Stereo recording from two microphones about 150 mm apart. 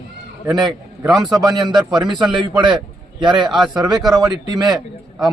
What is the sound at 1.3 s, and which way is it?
A man's voice, 25° right (ahead or behind).